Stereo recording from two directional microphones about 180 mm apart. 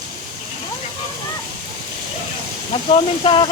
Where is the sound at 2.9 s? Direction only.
30° left (ahead or behind).